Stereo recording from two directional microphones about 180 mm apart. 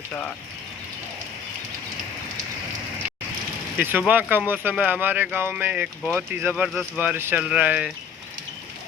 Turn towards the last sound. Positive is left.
turn(degrees=-5)  # may be behind; listen again after turning